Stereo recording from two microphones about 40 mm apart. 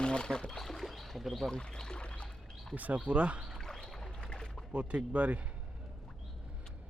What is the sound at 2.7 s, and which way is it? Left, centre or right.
Speech, right.